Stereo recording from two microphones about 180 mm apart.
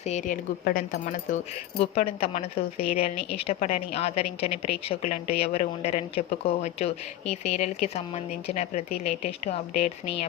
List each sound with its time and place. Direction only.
0.0 s speech: 40° left (ahead or behind)
1.8 s speech: 30° left (ahead or behind)